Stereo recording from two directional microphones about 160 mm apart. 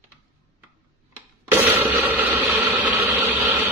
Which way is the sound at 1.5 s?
10° right (ahead or behind).